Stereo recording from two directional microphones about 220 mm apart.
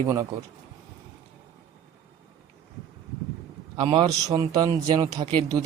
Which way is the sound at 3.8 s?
20° right (ahead or behind).